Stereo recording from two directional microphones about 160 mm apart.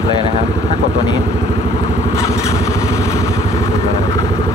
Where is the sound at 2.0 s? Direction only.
15° left (ahead or behind).